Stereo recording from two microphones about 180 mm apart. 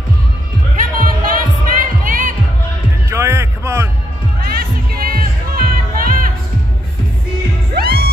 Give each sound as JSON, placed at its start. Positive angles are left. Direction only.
{"t": 0.7, "sound": "music", "side_deg": -50}
{"t": 3.1, "sound": "a sound", "side_deg": -15}
{"t": 4.4, "sound": "music", "side_deg": -55}
{"t": 7.7, "sound": "music", "side_deg": -60}